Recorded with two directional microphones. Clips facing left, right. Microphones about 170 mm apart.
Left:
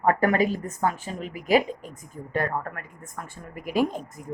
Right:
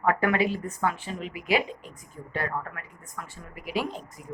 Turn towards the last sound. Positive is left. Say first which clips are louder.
# left 6 dB
turn(degrees=45)  # may be behind; listen again after turning